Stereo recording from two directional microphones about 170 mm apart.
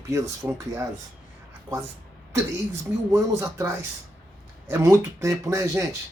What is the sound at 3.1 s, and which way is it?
Speech, 15° right (ahead or behind).